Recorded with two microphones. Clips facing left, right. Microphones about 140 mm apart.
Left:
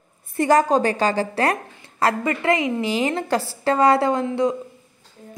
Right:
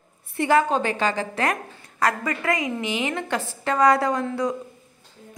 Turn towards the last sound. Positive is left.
turn(degrees=25)  # may be behind; listen again after turning